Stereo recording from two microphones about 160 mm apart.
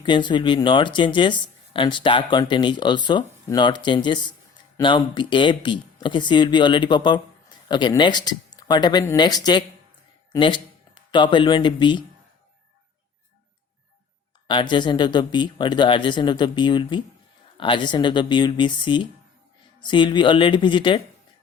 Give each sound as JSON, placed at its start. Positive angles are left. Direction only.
{"t": 0.0, "sound": "speech", "side_deg": 30}
{"t": 14.4, "sound": "speech", "side_deg": 30}